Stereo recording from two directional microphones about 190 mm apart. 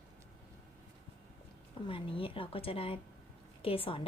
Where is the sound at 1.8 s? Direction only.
30° left (ahead or behind).